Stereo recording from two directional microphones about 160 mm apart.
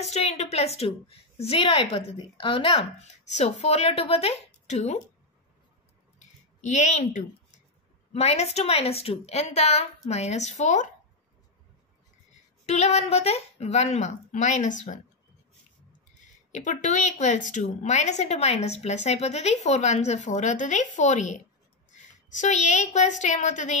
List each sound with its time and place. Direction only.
0.0 s a woman's voice: 45° left (ahead or behind)
3.0 s a woman's voice: 45° left (ahead or behind)
6.6 s a woman's voice: 50° left (ahead or behind)
12.6 s a woman's voice: 45° left (ahead or behind)
16.5 s a woman's voice: 50° left (ahead or behind)